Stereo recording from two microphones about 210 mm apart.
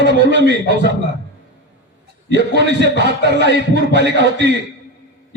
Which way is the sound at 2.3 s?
55° right (ahead or behind).